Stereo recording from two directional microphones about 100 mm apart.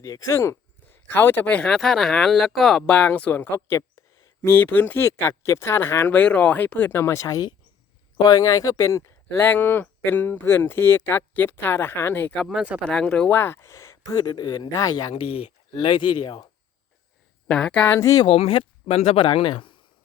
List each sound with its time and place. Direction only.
0.0 s speech: 35° left (ahead or behind)
12.5 s speech: 10° right (ahead or behind)
12.9 s speech: 10° left (ahead or behind)
13.4 s speech: 25° left (ahead or behind)
15.1 s speech: 70° left (ahead or behind); by 16.5 s 50° left (ahead or behind)
17.5 s speech: 10° left (ahead or behind)
17.9 s speech: 30° left (ahead or behind)
18.3 s speech: 70° left (ahead or behind); by 19.2 s 90° left
19.2 s speech: 55° left (ahead or behind)